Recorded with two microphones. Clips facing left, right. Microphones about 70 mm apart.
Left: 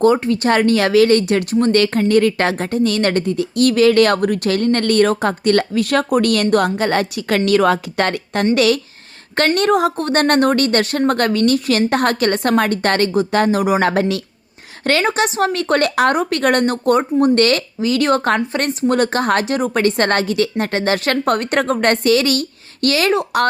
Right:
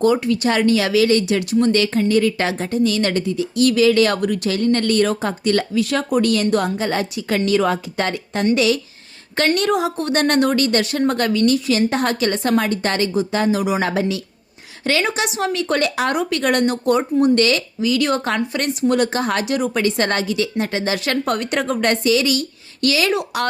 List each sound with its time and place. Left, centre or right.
0.0 s a woman's voice: left
9.6 s speech: left
15.0 s speech: left